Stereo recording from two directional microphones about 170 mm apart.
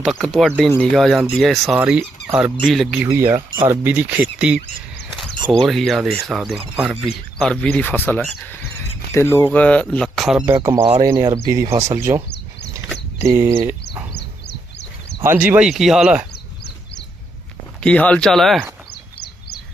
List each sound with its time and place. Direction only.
0.0 s speech: centre (ahead or behind)
3.0 s speech: 15° right (ahead or behind)
3.3 s speech: 30° right (ahead or behind)
3.7 s speech: 10° right (ahead or behind)
5.1 s a sound: centre (ahead or behind)
5.5 s speech: centre (ahead or behind)
7.0 s speech: 5° left (ahead or behind)
10.4 s speech: 15° right (ahead or behind)
14.1 s dog: 75° left (ahead or behind)
15.2 s speech: 10° right (ahead or behind)
16.3 s a sound: 75° left (ahead or behind)
17.8 s speech: 5° left (ahead or behind)